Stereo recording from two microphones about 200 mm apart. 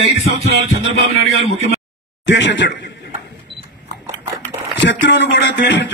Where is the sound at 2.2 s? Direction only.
65° left (ahead or behind).